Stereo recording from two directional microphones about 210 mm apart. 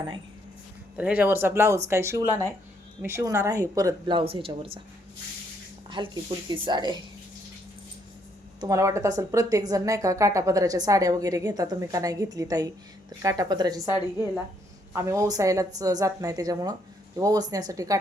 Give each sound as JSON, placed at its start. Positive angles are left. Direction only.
{"t": 0.9, "sound": "speech", "side_deg": -5}
{"t": 6.0, "sound": "speech", "side_deg": -25}
{"t": 8.6, "sound": "speech", "side_deg": -15}